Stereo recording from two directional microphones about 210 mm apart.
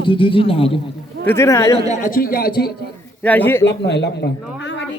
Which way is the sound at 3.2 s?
10° left (ahead or behind).